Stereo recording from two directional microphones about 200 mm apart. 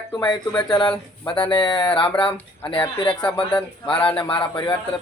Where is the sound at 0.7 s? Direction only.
20° left (ahead or behind).